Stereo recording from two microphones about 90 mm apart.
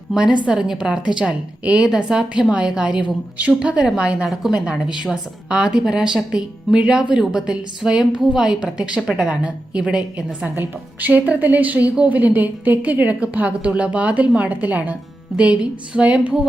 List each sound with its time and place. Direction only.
0.1 s a woman's voice: 10° right (ahead or behind)
10.5 s a woman's voice: 20° right (ahead or behind)